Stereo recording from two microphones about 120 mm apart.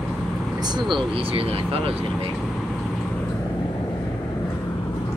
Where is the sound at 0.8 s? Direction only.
40° right (ahead or behind).